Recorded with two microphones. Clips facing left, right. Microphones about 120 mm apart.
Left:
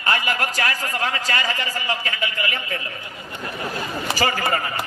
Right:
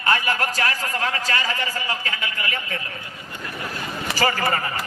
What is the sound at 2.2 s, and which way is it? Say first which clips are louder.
Speech: left 2 dB; 25° left (ahead or behind).